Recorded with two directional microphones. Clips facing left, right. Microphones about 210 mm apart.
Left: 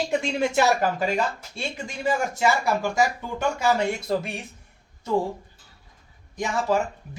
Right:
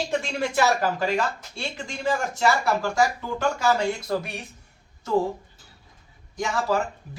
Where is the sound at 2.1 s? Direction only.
20° left (ahead or behind).